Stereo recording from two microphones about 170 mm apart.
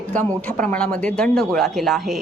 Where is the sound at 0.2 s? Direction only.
10° left (ahead or behind).